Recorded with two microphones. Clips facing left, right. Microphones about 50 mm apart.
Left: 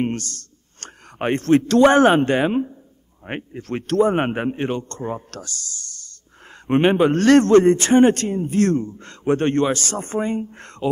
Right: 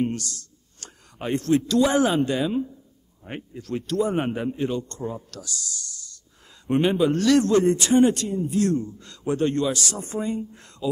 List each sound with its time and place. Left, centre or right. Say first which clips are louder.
0.0 s a man's voice: left 2 dB; left